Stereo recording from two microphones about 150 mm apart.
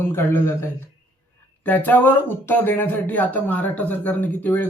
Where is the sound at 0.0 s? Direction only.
15° left (ahead or behind).